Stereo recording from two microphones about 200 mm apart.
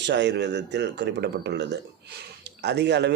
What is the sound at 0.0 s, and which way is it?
A man's voice, 60° right (ahead or behind).